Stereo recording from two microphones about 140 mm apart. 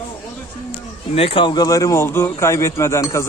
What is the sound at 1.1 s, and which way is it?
A man's voice, 40° left (ahead or behind).